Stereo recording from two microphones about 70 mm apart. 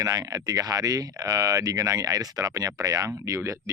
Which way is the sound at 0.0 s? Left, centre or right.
Right.